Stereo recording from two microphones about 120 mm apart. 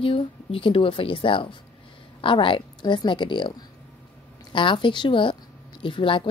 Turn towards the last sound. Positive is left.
turn(degrees=45)  # may be behind; listen again after turning